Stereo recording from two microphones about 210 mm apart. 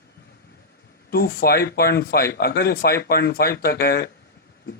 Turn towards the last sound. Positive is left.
turn(degrees=45)  # may be behind; listen again after turning